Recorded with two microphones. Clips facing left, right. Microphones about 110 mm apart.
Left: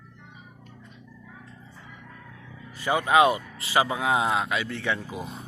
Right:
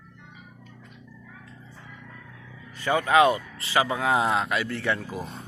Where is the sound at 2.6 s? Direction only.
5° left (ahead or behind).